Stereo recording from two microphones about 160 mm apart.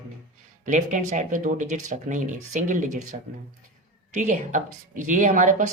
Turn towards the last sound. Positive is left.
turn(degrees=-55)  # may be behind; listen again after turning